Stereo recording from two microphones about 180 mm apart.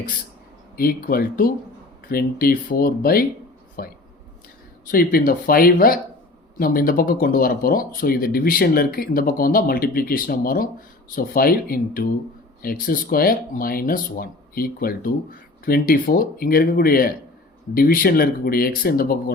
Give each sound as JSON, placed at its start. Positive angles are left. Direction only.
{"t": 0.8, "sound": "speech", "side_deg": 55}